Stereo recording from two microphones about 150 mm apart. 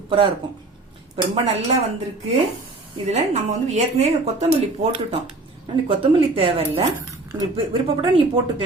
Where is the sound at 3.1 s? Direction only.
45° right (ahead or behind).